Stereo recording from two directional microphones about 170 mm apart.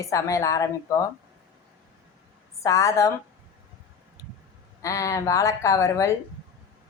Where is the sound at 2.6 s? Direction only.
20° left (ahead or behind).